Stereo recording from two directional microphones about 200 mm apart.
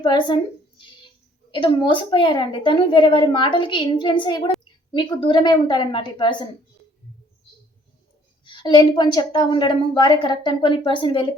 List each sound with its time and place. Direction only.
0.0 s a woman's voice: 25° left (ahead or behind)
8.4 s a woman's voice: 25° left (ahead or behind)